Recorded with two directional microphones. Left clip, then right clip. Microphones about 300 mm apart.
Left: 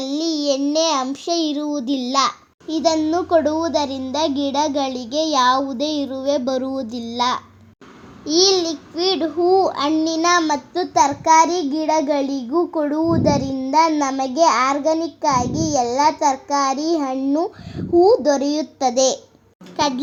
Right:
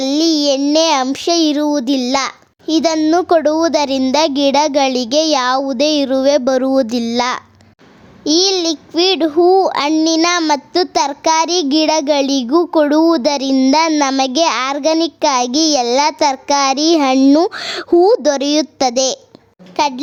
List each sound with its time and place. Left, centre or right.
0.0 s child singing: right
8.2 s a child's voice: right